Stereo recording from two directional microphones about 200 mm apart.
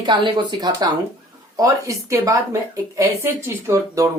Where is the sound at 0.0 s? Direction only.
20° right (ahead or behind).